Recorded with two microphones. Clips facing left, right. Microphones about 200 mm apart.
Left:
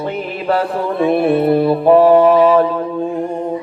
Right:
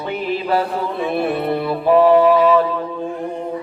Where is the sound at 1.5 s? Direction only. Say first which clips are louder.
Left 2 dB; 35° left (ahead or behind).